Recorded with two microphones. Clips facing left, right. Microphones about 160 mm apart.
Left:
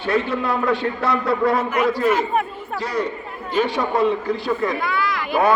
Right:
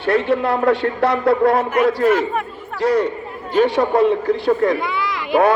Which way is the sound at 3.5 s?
55° right (ahead or behind).